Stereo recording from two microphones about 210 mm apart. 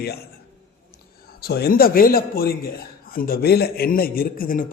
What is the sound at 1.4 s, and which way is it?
A man's voice, 45° left (ahead or behind).